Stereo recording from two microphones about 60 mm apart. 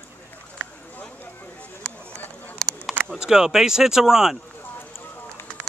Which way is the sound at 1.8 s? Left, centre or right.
Centre.